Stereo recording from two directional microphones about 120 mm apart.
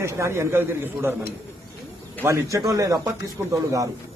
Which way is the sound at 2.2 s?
25° right (ahead or behind).